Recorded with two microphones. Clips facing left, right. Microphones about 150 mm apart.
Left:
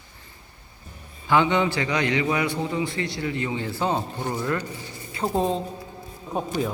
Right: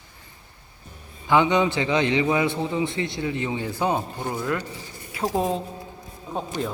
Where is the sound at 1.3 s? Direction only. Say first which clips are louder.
Right 1 dB; 20° right (ahead or behind).